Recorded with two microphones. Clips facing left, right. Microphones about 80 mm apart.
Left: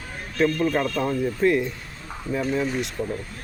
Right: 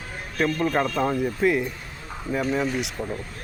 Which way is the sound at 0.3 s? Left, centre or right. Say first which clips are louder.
Left 1 dB; centre.